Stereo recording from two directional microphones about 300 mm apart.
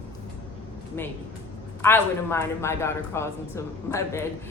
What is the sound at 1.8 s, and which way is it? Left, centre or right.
A woman's voice, centre.